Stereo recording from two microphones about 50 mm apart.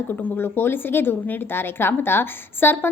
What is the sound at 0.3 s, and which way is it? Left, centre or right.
A woman's voice, left.